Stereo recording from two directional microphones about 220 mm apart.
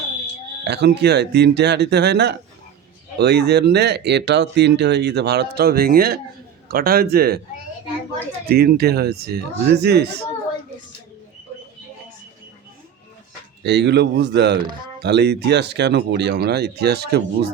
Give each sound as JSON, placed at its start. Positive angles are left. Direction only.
{"t": 0.6, "sound": "speech", "side_deg": -50}
{"t": 8.4, "sound": "speech", "side_deg": -45}
{"t": 13.7, "sound": "speech", "side_deg": -50}